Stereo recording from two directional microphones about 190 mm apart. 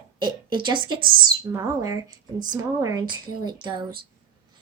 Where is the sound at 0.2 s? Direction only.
25° right (ahead or behind).